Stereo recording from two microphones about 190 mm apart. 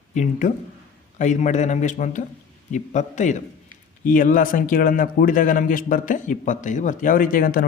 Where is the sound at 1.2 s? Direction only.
40° left (ahead or behind).